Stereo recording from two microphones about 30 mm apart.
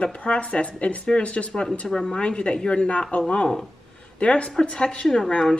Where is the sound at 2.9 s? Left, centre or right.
Left.